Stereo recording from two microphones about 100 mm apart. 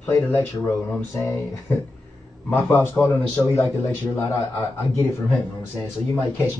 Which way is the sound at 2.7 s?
20° left (ahead or behind).